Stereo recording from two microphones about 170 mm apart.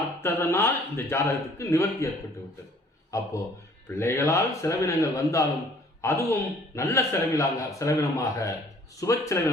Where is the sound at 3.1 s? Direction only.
20° left (ahead or behind).